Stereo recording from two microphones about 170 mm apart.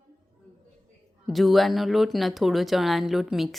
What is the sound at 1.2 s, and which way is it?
Speech, centre (ahead or behind).